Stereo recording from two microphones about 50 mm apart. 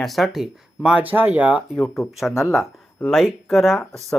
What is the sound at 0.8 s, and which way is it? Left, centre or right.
Speech, right.